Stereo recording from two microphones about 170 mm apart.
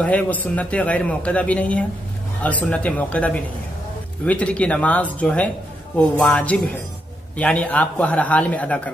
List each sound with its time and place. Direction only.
0.0 s a man's voice: 10° left (ahead or behind)